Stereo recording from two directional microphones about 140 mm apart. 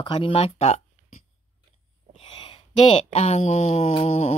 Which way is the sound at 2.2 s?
40° left (ahead or behind).